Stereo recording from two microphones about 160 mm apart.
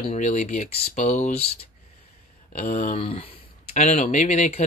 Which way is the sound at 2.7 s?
50° left (ahead or behind).